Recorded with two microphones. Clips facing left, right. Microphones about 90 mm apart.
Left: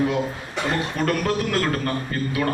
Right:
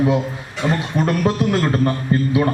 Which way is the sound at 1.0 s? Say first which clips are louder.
Right 5 dB; 25° right (ahead or behind).